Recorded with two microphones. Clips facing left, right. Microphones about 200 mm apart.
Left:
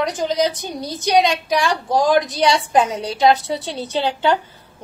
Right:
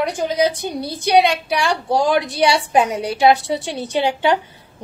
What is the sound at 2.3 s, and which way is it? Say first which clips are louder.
Speech: right 1 dB; 60° right (ahead or behind).